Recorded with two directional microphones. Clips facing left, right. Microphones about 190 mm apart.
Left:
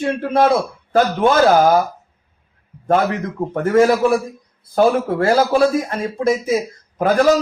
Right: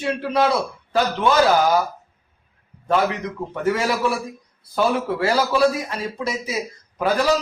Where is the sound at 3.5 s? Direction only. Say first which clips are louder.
Left 8 dB; 50° left (ahead or behind).